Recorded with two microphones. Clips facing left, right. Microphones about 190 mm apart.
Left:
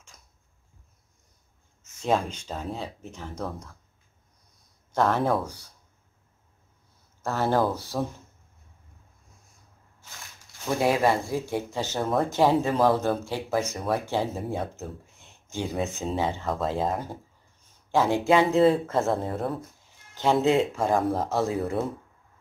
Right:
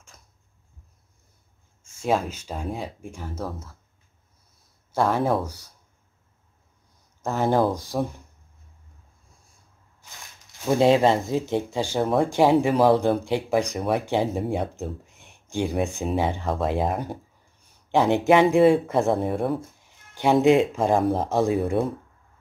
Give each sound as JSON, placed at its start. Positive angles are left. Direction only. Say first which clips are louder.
{"t": 0.1, "sound": "a sound", "louder": "right 4 dB", "side_deg": -55}
{"t": 1.8, "sound": "speech", "louder": "right 1 dB", "side_deg": -10}
{"t": 4.9, "sound": "speech", "louder": "right 1 dB", "side_deg": -10}
{"t": 7.2, "sound": "speech", "louder": "right 3 dB", "side_deg": -15}
{"t": 10.8, "sound": "speech", "louder": "right 5 dB", "side_deg": -25}